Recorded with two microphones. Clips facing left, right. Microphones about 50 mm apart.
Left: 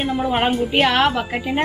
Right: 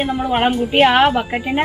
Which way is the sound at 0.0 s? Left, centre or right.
Centre.